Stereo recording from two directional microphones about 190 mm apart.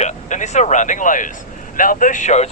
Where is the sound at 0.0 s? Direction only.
40° left (ahead or behind).